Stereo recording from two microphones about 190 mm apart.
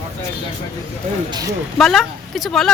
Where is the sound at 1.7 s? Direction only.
Centre (ahead or behind).